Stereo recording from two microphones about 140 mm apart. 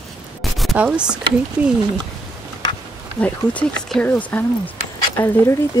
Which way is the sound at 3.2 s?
10° left (ahead or behind).